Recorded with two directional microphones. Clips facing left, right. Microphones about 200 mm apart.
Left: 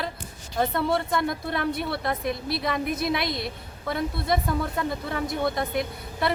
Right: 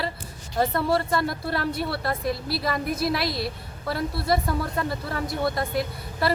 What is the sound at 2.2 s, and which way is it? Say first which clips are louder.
A woman's voice: right 2 dB; 20° left (ahead or behind).